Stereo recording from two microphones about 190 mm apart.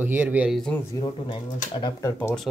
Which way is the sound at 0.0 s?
10° right (ahead or behind).